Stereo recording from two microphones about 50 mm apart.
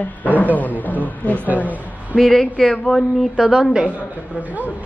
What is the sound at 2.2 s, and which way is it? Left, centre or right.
Speech, centre.